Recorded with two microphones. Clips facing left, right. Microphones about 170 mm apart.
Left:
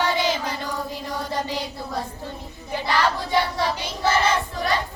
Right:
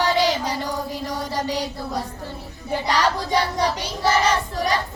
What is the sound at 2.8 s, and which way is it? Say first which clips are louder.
Child singing: right 1 dB; 20° right (ahead or behind).